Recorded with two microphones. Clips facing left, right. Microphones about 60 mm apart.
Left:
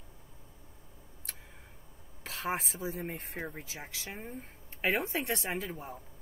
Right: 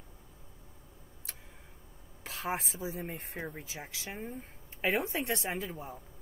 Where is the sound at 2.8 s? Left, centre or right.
Centre.